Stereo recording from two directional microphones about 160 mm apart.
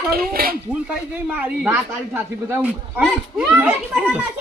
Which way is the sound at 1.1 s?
10° right (ahead or behind).